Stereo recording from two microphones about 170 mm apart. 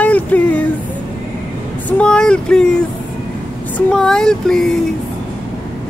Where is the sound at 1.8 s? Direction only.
5° left (ahead or behind).